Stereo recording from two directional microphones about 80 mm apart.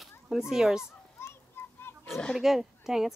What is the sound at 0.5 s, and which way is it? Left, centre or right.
Speech, centre.